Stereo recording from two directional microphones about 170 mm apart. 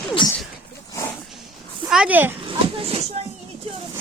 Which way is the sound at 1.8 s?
5° right (ahead or behind).